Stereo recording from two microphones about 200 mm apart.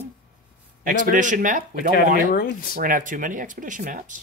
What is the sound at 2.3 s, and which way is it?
Speech, 45° left (ahead or behind).